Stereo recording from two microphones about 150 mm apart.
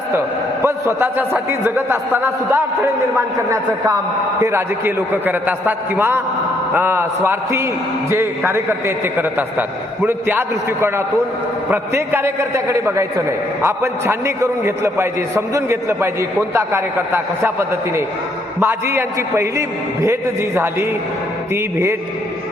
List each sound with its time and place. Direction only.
0.6 s a man's voice: 15° right (ahead or behind)
21.5 s a man's voice: 15° right (ahead or behind)